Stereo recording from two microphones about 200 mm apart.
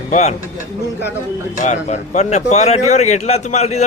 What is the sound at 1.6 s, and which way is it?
A man's voice, 35° left (ahead or behind).